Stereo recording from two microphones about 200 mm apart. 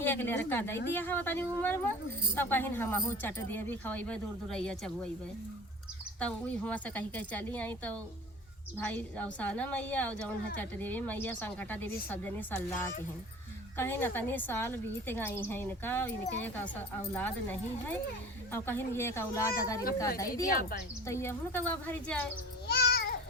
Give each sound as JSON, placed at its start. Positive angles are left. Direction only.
{"t": 0.0, "sound": "a woman's voice", "side_deg": 10}
{"t": 6.1, "sound": "a woman's voice", "side_deg": 5}
{"t": 17.2, "sound": "a woman's voice", "side_deg": 10}
{"t": 20.5, "sound": "speech", "side_deg": 45}
{"t": 21.1, "sound": "a woman's voice", "side_deg": 10}
{"t": 22.6, "sound": "a sound", "side_deg": 55}